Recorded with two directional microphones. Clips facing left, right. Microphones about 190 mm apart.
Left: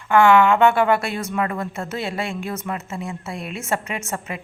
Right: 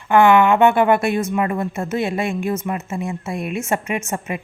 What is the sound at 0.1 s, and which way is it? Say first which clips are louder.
A woman's voice: right 2 dB; 20° right (ahead or behind).